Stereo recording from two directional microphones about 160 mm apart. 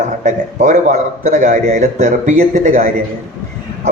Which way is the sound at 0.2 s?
50° right (ahead or behind).